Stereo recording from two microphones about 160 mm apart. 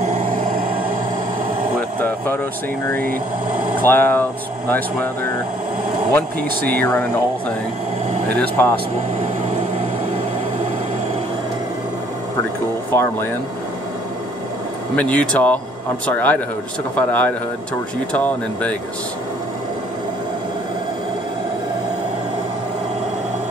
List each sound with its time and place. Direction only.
0.0 s a sound: 55° right (ahead or behind)
2.0 s a sound: 10° left (ahead or behind)
3.8 s speech: 15° left (ahead or behind)
6.8 s speech: 10° left (ahead or behind)
12.9 s speech: 15° left (ahead or behind)
15.0 s speech: 10° left (ahead or behind)